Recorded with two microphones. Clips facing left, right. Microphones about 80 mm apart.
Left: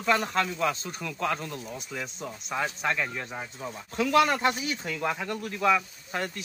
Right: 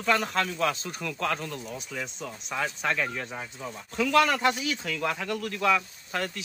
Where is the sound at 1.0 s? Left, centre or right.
Centre.